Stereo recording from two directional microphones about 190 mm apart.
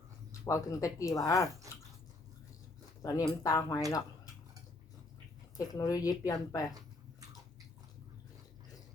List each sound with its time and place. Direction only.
0.3 s speech: 15° left (ahead or behind)
3.0 s speech: 20° left (ahead or behind)
5.5 s a woman's voice: 20° left (ahead or behind)